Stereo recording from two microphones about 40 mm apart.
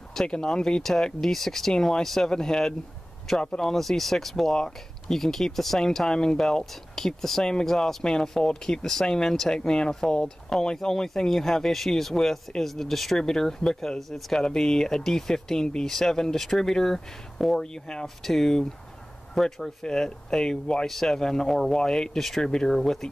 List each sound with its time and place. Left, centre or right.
0.3 s speech: centre
1.2 s speech: centre
3.7 s speech: centre
4.5 s speech: centre
20.8 s speech: centre
22.4 s speech: centre
22.7 s speech: centre